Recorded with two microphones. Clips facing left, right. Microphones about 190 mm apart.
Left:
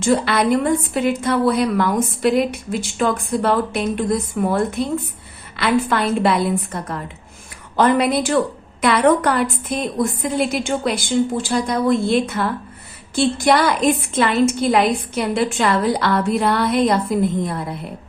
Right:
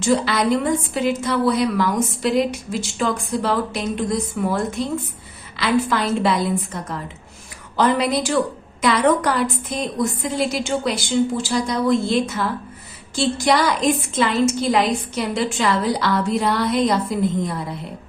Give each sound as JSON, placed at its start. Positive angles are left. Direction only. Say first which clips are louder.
{"t": 0.0, "sound": "a woman's voice", "louder": "left 2 dB", "side_deg": 55}